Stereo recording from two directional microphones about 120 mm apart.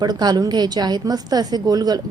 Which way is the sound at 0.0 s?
35° right (ahead or behind).